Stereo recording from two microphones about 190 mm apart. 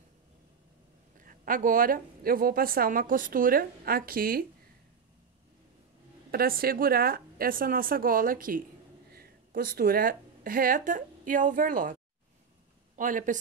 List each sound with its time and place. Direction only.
1.2 s a woman's voice: 45° right (ahead or behind)
6.3 s a woman's voice: 50° right (ahead or behind)